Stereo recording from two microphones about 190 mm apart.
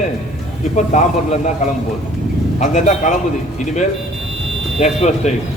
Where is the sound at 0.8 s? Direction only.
40° left (ahead or behind).